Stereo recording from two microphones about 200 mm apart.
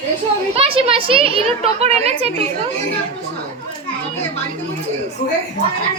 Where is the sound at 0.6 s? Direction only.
30° right (ahead or behind).